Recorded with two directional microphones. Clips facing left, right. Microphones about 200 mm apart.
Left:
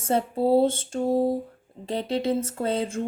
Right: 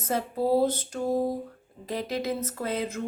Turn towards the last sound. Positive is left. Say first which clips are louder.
# left 4 dB
turn(degrees=30)  # may be behind; listen again after turning